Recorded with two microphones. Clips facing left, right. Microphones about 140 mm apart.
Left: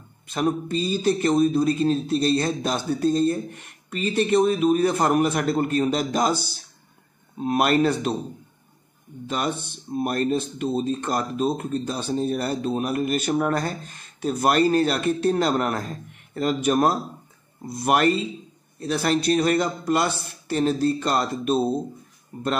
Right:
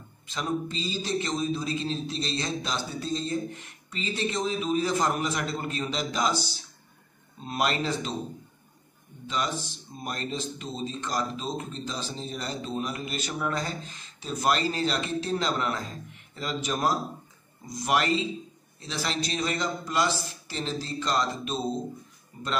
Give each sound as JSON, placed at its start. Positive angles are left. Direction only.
{"t": 0.3, "sound": "speech", "side_deg": 55}
{"t": 9.3, "sound": "speech", "side_deg": 55}